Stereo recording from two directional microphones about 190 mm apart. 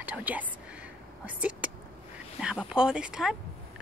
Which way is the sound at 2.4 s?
5° right (ahead or behind).